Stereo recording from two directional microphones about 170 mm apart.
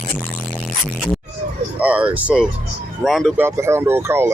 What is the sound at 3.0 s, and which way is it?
Speech, centre (ahead or behind).